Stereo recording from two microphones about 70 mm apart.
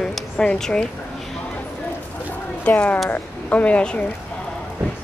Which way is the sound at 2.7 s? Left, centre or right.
Left.